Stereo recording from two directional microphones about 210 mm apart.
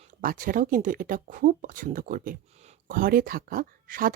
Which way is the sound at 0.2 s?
40° right (ahead or behind).